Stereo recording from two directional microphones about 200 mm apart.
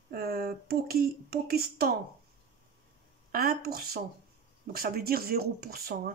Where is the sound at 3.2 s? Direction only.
50° right (ahead or behind).